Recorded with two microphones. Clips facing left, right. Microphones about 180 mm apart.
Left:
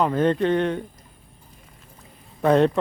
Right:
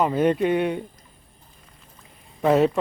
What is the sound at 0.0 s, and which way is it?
Speech, 10° right (ahead or behind).